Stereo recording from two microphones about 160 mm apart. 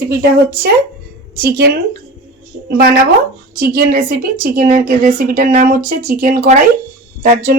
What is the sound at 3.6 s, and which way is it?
A woman's voice, 65° right (ahead or behind).